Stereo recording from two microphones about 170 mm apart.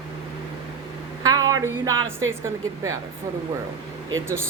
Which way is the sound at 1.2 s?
20° right (ahead or behind).